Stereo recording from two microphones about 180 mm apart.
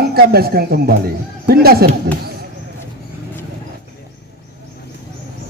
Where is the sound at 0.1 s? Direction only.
60° right (ahead or behind).